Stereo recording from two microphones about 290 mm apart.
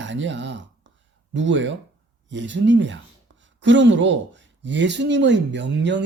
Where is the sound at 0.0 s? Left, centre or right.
Right.